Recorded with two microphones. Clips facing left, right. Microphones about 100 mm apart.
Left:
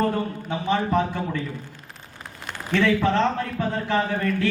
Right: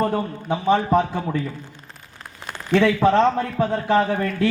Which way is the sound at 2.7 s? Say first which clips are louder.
Right 4 dB; 20° right (ahead or behind).